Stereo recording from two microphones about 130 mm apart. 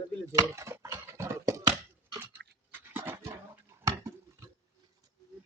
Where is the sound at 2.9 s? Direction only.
15° right (ahead or behind).